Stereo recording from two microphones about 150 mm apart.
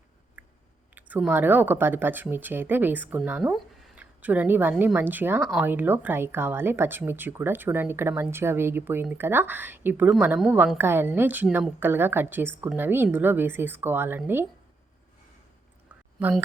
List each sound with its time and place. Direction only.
0.4 s chewing: 10° right (ahead or behind)
0.9 s speech: 10° right (ahead or behind)